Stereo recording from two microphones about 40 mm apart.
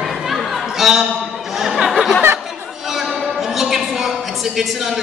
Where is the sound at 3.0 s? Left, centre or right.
Centre.